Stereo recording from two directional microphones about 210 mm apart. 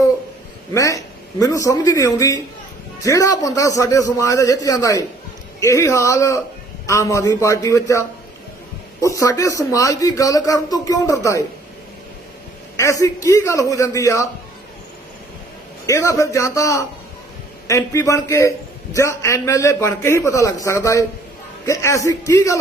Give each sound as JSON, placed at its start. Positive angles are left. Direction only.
{"t": 0.7, "sound": "speech", "side_deg": 15}
{"t": 12.7, "sound": "speech", "side_deg": 15}
{"t": 15.9, "sound": "speech", "side_deg": 15}